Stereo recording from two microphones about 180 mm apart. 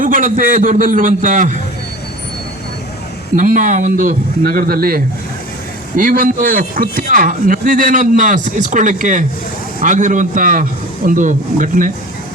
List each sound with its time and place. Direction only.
0.0 s speech: 50° right (ahead or behind)
3.3 s speech: 45° right (ahead or behind)